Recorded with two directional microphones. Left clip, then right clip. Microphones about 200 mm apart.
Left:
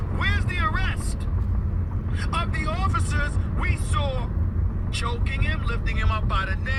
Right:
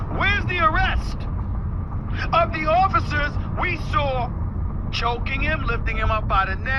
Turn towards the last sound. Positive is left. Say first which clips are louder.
# right 6 dB
turn(degrees=-35)  # may be behind; listen again after turning